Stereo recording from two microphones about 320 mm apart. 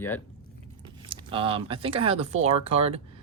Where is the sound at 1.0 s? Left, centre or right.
Centre.